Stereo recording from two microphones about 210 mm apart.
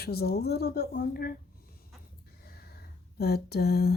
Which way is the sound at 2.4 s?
50° left (ahead or behind).